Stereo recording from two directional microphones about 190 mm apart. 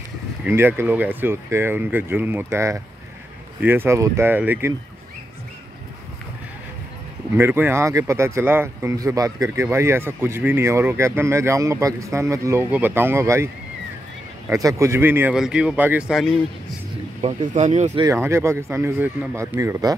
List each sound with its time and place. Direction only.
0.4 s speech: 10° right (ahead or behind)
7.3 s speech: 10° right (ahead or behind)
14.5 s speech: 15° right (ahead or behind); by 16.3 s centre (ahead or behind)
17.2 s speech: 35° right (ahead or behind)
18.0 s speech: 15° right (ahead or behind)